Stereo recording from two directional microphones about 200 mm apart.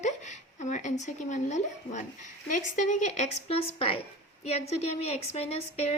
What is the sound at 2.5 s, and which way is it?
A woman's voice, 40° left (ahead or behind).